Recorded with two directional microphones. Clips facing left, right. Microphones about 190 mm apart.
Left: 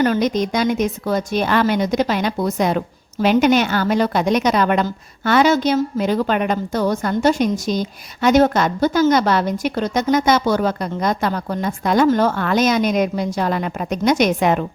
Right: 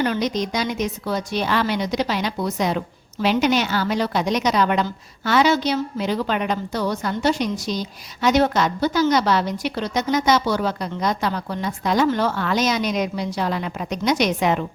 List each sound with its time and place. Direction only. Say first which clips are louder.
0.0 s a woman's voice: left 5 dB; 50° left (ahead or behind)